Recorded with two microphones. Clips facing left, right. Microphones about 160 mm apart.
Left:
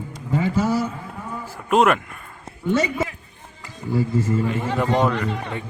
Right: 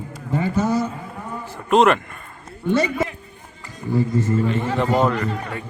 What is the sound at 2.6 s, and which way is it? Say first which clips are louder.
A man's voice: right 1 dB; 10° left (ahead or behind).